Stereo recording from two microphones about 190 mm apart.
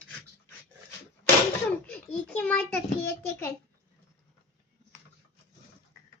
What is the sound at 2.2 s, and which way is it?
Child singing, 5° left (ahead or behind).